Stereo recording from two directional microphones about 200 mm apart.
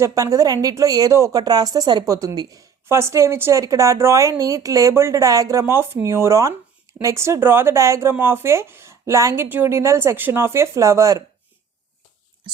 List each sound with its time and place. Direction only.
0.0 s a woman's voice: 15° right (ahead or behind)